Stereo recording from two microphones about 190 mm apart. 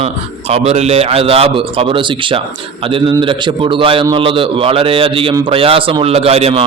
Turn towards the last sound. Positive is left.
turn(degrees=-30)  # may be behind; listen again after turning